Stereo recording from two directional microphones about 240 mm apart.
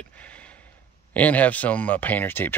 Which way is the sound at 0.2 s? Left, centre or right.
Centre.